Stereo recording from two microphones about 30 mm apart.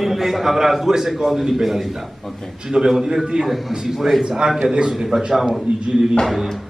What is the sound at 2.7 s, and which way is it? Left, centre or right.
Speech, right.